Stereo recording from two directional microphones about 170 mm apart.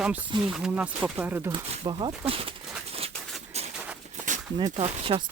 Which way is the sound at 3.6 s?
40° right (ahead or behind).